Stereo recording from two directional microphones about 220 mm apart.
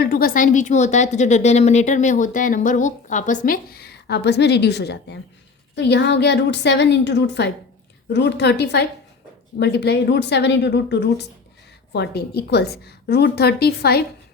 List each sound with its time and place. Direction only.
0.0 s a woman's voice: 40° left (ahead or behind)